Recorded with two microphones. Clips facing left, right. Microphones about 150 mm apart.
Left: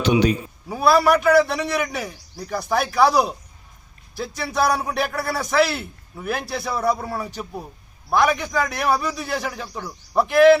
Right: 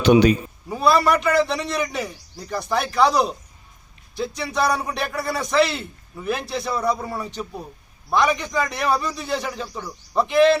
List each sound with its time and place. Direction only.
0.0 s a man's voice: 75° right (ahead or behind)
0.7 s a man's voice: 5° left (ahead or behind)
4.4 s a man's voice: 5° left (ahead or behind)